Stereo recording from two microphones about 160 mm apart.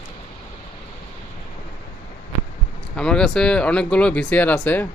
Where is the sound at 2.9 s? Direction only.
5° left (ahead or behind).